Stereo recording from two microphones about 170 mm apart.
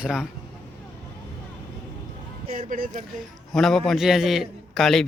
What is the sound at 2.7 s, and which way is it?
Speech, 50° right (ahead or behind).